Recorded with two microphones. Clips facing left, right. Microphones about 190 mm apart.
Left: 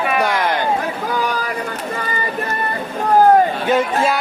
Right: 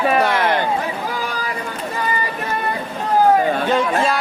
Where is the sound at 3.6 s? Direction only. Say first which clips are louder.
Left 1 dB; 5° left (ahead or behind).